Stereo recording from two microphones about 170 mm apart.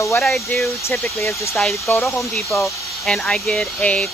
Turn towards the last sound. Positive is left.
turn(degrees=5)  # may be behind; listen again after turning